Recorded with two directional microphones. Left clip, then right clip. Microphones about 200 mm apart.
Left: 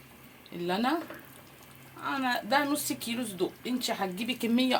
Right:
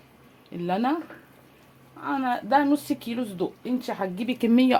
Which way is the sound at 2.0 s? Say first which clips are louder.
Right 4 dB; 45° right (ahead or behind).